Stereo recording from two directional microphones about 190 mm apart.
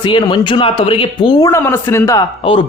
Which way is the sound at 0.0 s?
25° left (ahead or behind).